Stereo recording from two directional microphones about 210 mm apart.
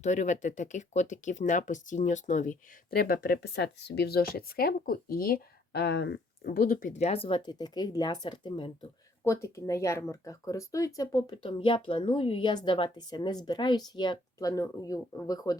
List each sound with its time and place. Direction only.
0.0 s speech: 35° left (ahead or behind); by 15.5 s 15° left (ahead or behind)